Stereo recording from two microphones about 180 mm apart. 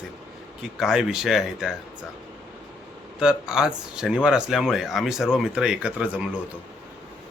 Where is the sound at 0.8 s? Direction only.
Centre (ahead or behind).